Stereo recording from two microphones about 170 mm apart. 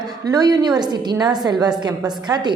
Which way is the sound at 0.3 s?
20° right (ahead or behind).